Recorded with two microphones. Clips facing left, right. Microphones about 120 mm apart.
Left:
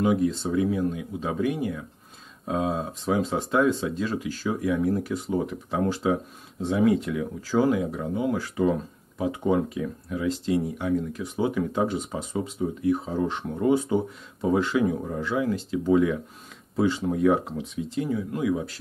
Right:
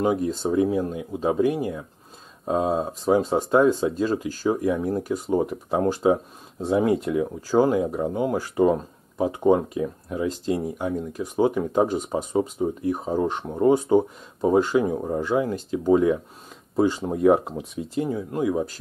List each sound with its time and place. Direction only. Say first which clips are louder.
0.0 s speech: even; 35° right (ahead or behind)
4.7 s speech: left 1 dB; 25° right (ahead or behind)
5.0 s speech: right 4 dB; 40° right (ahead or behind)